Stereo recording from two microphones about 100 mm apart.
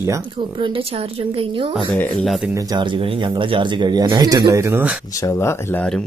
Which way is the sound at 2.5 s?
40° right (ahead or behind).